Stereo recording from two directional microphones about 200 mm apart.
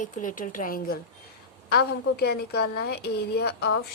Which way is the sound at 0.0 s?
40° left (ahead or behind).